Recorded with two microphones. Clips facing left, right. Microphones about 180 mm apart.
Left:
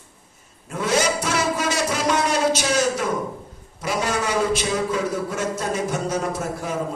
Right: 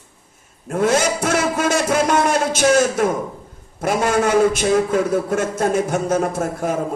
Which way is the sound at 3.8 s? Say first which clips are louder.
Right 6 dB; 50° right (ahead or behind).